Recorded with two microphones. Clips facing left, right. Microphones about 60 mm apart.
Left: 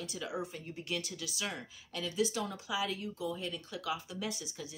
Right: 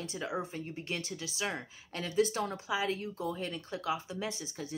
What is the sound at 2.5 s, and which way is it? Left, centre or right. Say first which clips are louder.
Speech: right 3 dB; right.